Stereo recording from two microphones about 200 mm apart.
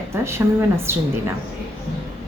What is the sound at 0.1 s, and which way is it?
Speech, 15° right (ahead or behind).